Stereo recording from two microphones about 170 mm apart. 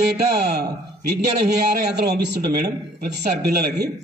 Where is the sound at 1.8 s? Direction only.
70° right (ahead or behind).